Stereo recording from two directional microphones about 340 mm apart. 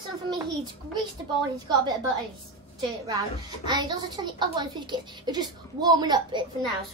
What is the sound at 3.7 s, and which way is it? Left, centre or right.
A woman's voice, centre.